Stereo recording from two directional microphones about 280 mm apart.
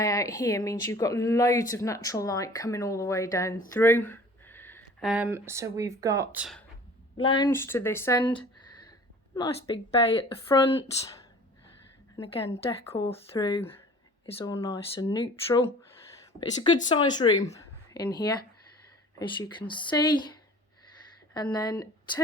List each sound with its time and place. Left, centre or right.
0.0 s speech: centre
7.2 s speech: centre
12.1 s speech: centre
21.3 s speech: centre